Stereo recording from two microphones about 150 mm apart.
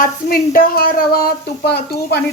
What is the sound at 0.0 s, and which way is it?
A woman's voice, 70° left (ahead or behind).